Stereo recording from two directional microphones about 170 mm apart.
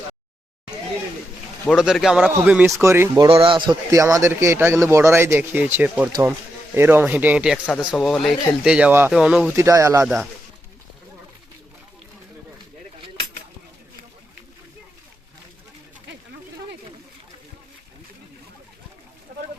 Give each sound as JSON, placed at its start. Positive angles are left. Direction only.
{"t": 1.6, "sound": "a man's voice", "side_deg": -5}
{"t": 3.2, "sound": "a man's voice", "side_deg": -30}
{"t": 3.9, "sound": "a man's voice", "side_deg": -15}
{"t": 9.6, "sound": "a man's voice", "side_deg": -15}